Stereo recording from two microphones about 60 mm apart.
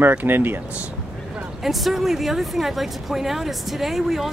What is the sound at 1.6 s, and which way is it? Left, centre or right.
Speech, centre.